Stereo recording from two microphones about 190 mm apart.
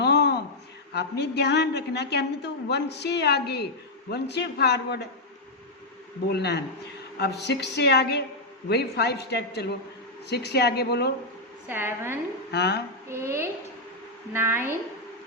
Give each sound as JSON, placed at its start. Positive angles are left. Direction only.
{"t": 0.0, "sound": "a sound", "side_deg": 60}
{"t": 0.9, "sound": "a woman's voice", "side_deg": 60}
{"t": 6.2, "sound": "a woman's voice", "side_deg": 60}
{"t": 11.7, "sound": "a woman's voice", "side_deg": -10}
{"t": 12.5, "sound": "a woman's voice", "side_deg": 60}
{"t": 13.1, "sound": "a woman's voice", "side_deg": -15}